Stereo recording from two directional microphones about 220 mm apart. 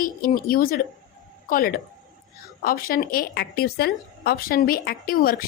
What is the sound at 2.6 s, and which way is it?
A woman's voice, 40° left (ahead or behind).